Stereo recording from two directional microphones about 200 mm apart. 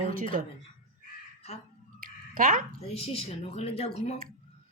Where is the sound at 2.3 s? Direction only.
45° right (ahead or behind).